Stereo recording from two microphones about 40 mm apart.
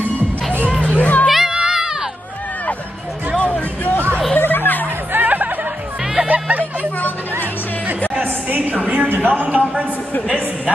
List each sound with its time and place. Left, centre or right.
0.7 s music: left
0.9 s music: left
1.2 s music: centre
1.5 s music: centre
3.3 s music: left
4.4 s music: left
5.1 s music: right
8.2 s a sound: right
8.6 s a sound: right
8.9 s music: right
9.3 s a sound: right